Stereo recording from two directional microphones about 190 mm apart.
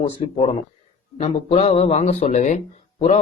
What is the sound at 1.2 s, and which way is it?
Speech, 30° left (ahead or behind).